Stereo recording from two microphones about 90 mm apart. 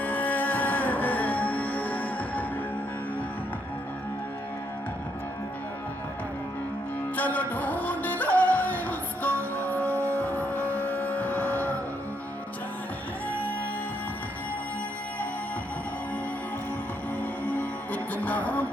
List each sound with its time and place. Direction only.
0.0 s music: 15° left (ahead or behind)
7.2 s music: 20° left (ahead or behind)
17.2 s music: 15° left (ahead or behind)